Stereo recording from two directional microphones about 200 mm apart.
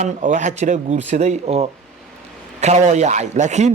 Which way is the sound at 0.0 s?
40° right (ahead or behind).